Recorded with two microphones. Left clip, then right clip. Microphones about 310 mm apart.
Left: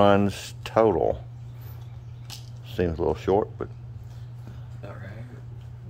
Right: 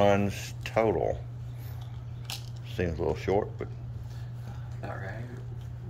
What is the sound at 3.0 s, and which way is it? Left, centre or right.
Speech, left.